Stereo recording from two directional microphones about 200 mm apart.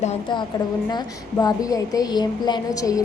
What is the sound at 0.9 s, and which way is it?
A woman's voice, 20° left (ahead or behind).